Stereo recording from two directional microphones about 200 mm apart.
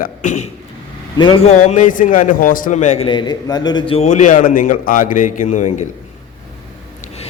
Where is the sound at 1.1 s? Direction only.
25° left (ahead or behind).